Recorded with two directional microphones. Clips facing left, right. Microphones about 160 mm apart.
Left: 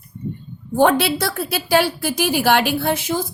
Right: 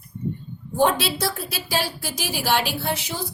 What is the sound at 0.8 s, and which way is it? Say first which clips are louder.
A woman's voice: left 5 dB; 60° left (ahead or behind).